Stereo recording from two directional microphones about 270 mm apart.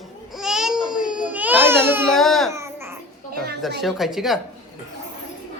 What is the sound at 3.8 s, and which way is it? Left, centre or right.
Speech, centre.